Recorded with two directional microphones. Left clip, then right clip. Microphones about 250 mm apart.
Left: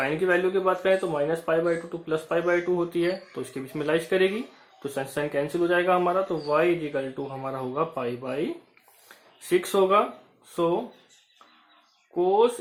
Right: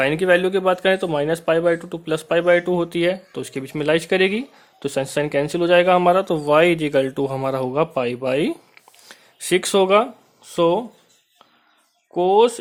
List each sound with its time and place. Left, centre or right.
0.0 s speech: right
12.1 s speech: right